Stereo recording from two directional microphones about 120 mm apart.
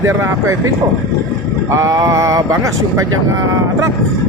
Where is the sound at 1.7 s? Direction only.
25° right (ahead or behind).